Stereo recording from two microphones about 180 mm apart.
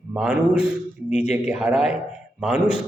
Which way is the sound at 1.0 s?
40° left (ahead or behind).